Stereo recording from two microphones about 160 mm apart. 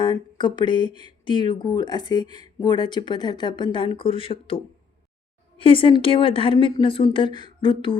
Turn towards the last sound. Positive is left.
turn(degrees=30)  # may be behind; listen again after turning